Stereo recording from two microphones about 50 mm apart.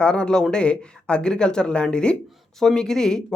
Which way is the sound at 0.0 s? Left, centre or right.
Centre.